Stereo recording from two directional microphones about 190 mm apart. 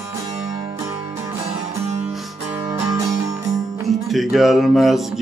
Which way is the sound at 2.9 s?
15° right (ahead or behind).